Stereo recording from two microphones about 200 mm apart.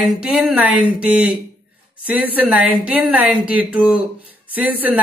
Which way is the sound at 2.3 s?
5° right (ahead or behind).